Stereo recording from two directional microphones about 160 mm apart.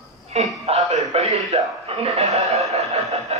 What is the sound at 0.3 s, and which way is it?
A man's voice, 40° right (ahead or behind).